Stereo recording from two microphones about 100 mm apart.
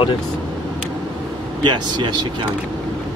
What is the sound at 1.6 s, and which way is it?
Speech, 50° right (ahead or behind).